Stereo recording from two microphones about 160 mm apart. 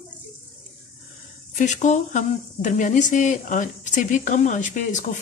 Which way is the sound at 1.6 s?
50° left (ahead or behind).